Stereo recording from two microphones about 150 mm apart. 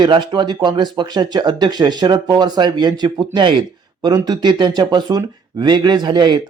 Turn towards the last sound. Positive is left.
turn(degrees=-30)  # may be behind; listen again after turning